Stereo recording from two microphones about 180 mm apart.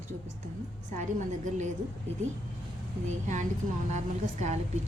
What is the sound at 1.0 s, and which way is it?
Speech, 45° right (ahead or behind).